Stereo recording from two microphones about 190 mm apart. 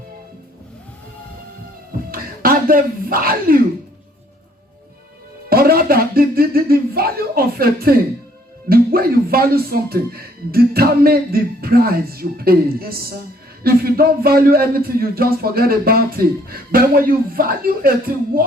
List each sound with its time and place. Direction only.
2.0 s speech: 50° right (ahead or behind)
5.5 s a sound: 50° right (ahead or behind)
8.7 s speech: 50° right (ahead or behind)